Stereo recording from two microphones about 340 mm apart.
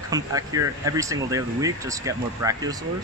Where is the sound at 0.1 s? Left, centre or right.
Centre.